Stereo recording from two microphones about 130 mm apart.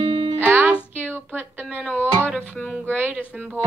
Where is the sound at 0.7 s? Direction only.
10° left (ahead or behind).